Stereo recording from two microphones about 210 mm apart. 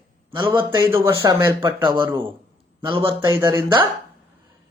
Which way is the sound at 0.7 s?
10° right (ahead or behind).